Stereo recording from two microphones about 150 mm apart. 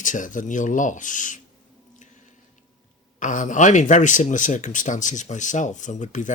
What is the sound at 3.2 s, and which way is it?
Speech, 60° left (ahead or behind).